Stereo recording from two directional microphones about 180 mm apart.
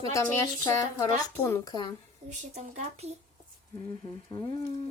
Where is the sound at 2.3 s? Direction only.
40° right (ahead or behind).